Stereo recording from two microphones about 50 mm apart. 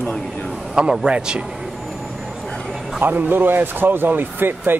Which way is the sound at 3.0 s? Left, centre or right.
Right.